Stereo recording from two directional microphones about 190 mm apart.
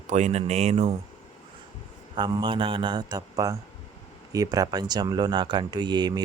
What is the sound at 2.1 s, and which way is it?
Speech, 25° right (ahead or behind).